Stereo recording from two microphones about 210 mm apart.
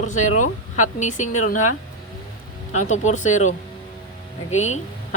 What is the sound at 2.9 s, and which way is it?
Speech, 35° left (ahead or behind).